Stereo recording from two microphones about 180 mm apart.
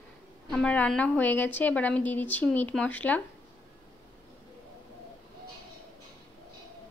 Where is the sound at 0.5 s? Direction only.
5° left (ahead or behind).